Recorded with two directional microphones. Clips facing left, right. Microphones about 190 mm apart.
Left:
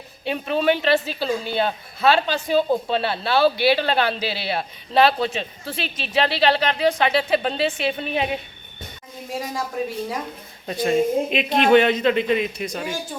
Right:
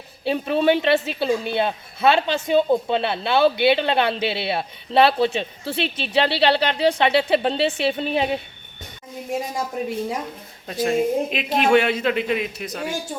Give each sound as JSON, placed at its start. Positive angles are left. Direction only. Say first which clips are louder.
{"t": 0.3, "sound": "speech", "louder": "right 2 dB", "side_deg": -30}
{"t": 10.7, "sound": "speech", "louder": "left 1 dB", "side_deg": 0}